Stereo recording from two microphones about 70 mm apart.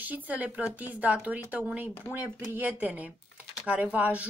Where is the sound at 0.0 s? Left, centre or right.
Right.